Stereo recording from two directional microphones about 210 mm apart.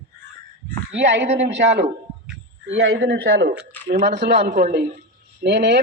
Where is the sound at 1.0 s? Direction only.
55° right (ahead or behind).